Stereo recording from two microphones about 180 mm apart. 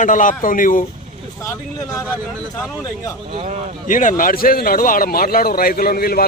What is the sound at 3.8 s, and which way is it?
A man's voice, 45° left (ahead or behind).